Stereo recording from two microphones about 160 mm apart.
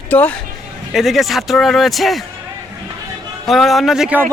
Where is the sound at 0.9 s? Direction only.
Centre (ahead or behind).